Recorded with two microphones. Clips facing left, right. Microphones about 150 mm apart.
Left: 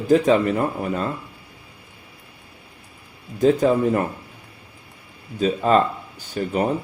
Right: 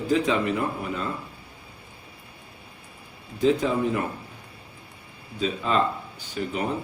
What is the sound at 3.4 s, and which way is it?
Speech, 45° left (ahead or behind).